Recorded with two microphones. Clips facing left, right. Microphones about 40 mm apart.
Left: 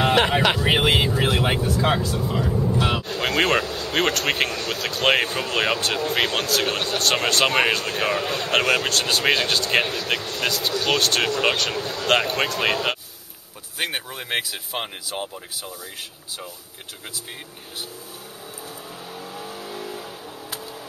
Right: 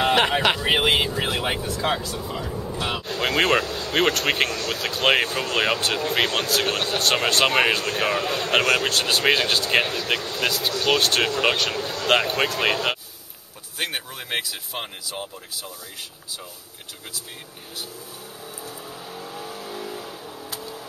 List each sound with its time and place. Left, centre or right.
0.0 s speech: centre
19.1 s vehicle: centre